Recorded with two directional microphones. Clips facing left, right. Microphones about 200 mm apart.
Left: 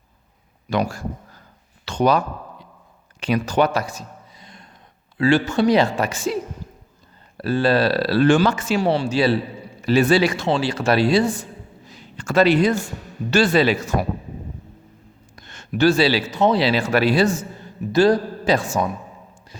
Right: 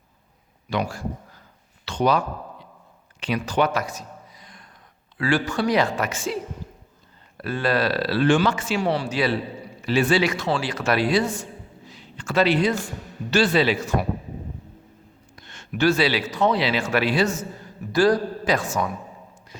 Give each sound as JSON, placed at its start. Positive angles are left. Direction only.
{"t": 0.7, "sound": "speech", "side_deg": 40}
{"t": 1.8, "sound": "a sound", "side_deg": 45}
{"t": 5.1, "sound": "a man's voice", "side_deg": 25}
{"t": 7.3, "sound": "speech", "side_deg": 30}
{"t": 8.9, "sound": "a man's voice", "side_deg": 30}
{"t": 11.9, "sound": "a sound", "side_deg": 45}
{"t": 13.3, "sound": "speech", "side_deg": 45}
{"t": 15.4, "sound": "a man's voice", "side_deg": 45}